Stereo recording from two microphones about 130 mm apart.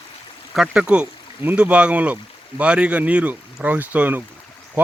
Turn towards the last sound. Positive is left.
turn(degrees=-15)  # may be behind; listen again after turning